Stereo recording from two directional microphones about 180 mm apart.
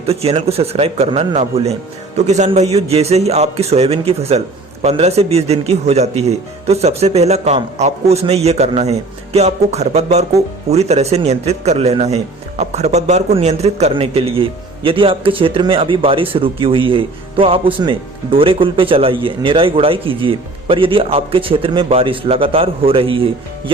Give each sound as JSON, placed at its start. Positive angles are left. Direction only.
{"t": 0.1, "sound": "a man's voice", "side_deg": -35}